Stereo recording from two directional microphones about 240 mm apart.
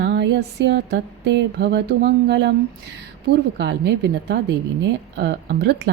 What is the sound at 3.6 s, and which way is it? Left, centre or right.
Speech, right.